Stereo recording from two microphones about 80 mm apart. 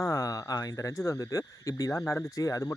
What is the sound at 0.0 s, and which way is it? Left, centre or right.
Speech, left.